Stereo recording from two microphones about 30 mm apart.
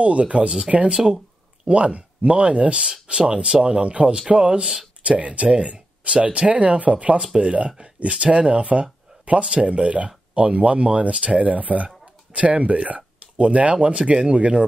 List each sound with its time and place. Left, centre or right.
0.0 s speech: right
0.4 s speech: right
0.7 s speech: right
0.9 s a sound: centre
1.7 s speech: right
5.0 s speech: right
6.5 s speech: right